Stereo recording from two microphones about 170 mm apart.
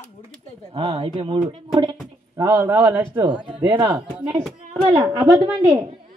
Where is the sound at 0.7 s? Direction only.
35° right (ahead or behind).